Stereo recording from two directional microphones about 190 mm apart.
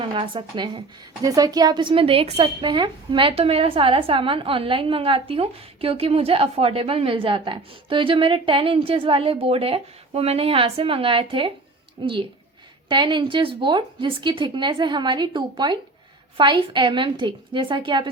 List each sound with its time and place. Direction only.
0.1 s speech: 25° right (ahead or behind)